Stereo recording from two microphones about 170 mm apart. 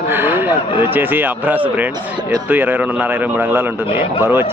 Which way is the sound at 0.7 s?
10° right (ahead or behind).